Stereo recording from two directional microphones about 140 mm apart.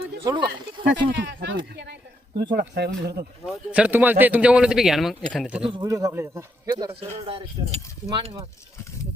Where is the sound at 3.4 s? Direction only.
5° right (ahead or behind).